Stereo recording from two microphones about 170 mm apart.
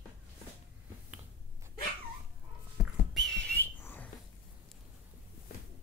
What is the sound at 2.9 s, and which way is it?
Whistling, centre (ahead or behind).